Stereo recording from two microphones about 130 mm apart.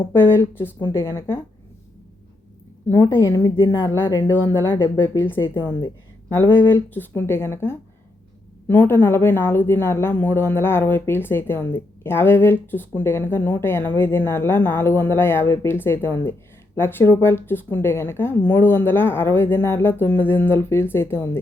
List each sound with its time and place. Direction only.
0.1 s a woman's voice: 15° left (ahead or behind)
3.2 s a woman's voice: 30° left (ahead or behind)
4.3 s speech: 15° left (ahead or behind)
5.4 s a woman's voice: 40° left (ahead or behind)
6.3 s speech: 15° left (ahead or behind)